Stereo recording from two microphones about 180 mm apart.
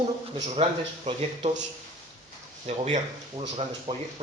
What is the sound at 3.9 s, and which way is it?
Speech, 35° right (ahead or behind).